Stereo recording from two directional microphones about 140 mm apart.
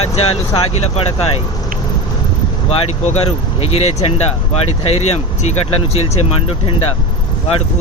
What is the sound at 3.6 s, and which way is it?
Speech, 45° left (ahead or behind).